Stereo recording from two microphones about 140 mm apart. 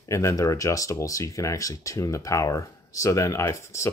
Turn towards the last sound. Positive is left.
turn(degrees=20)  # may be behind; listen again after turning